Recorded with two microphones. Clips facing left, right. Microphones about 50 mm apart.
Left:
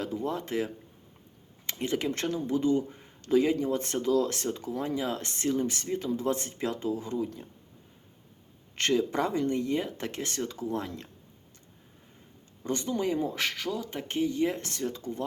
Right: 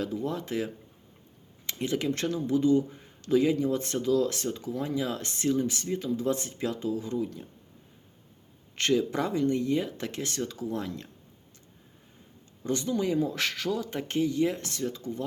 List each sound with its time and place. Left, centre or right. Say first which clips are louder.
0.0 s speech: even; left
8.7 s speech: right 1 dB; left
12.6 s speech: right 1 dB; left
13.3 s speech: right 2 dB; centre
14.2 s speech: right 1 dB; left